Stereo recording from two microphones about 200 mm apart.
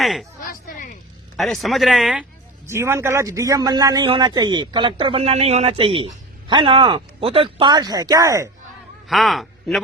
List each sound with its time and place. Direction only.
0.0 s speech: centre (ahead or behind)
1.4 s speech: centre (ahead or behind)
2.6 s a man's voice: 15° right (ahead or behind)
9.0 s a man's voice: centre (ahead or behind)